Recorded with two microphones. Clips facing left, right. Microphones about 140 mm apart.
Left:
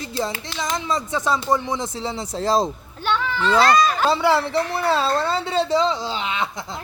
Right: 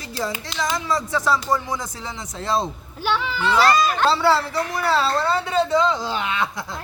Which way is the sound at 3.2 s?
10° right (ahead or behind).